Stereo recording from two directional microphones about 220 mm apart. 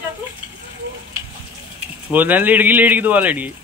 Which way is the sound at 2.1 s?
10° right (ahead or behind).